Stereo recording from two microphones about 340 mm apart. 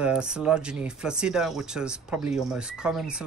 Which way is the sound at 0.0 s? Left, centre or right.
Centre.